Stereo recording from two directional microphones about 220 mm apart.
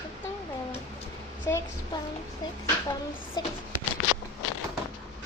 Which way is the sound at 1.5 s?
10° left (ahead or behind).